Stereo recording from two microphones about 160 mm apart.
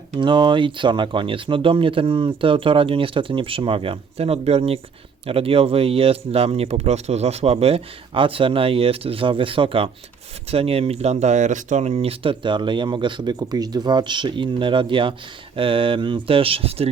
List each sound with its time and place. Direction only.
0.2 s speech: 30° right (ahead or behind)